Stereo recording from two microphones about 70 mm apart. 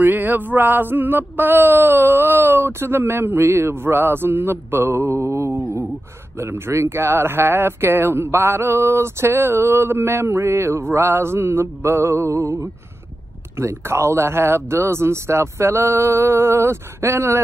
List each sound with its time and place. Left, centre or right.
0.0 s speech: right